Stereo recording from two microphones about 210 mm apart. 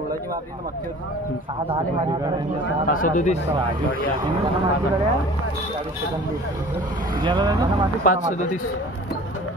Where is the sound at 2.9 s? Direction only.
40° left (ahead or behind).